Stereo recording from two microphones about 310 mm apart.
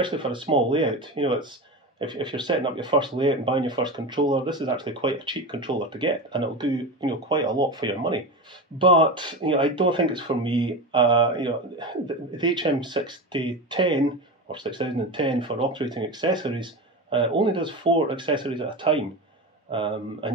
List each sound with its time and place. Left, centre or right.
0.0 s speech: centre